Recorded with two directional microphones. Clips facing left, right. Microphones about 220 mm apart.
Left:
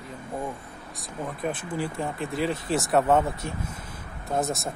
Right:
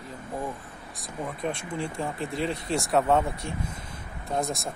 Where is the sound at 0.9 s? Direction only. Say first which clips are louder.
Even; centre (ahead or behind).